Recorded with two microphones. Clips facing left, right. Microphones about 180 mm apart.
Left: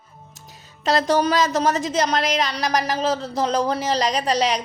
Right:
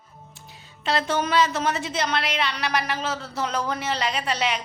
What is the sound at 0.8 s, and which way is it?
A woman's voice, 40° left (ahead or behind).